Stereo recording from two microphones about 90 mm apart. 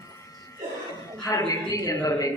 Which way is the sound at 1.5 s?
45° left (ahead or behind).